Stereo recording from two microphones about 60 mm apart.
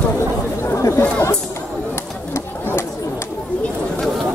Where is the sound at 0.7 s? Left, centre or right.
Left.